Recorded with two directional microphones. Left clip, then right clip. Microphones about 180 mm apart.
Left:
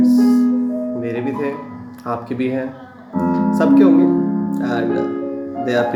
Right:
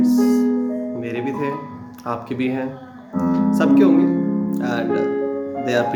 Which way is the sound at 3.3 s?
15° right (ahead or behind).